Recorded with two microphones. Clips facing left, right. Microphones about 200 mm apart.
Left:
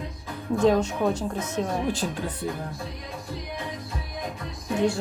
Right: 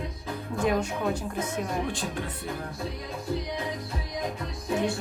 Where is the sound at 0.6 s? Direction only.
10° right (ahead or behind).